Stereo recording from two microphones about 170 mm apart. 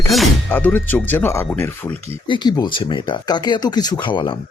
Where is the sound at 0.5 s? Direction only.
10° left (ahead or behind).